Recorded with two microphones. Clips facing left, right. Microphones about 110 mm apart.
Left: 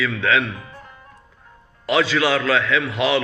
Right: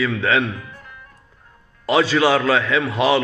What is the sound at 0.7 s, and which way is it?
Music, 30° left (ahead or behind).